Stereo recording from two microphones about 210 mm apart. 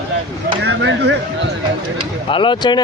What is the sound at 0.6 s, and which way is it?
Speech, 55° right (ahead or behind).